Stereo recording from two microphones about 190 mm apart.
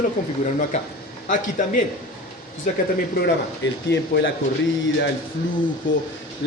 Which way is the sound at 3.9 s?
65° left (ahead or behind).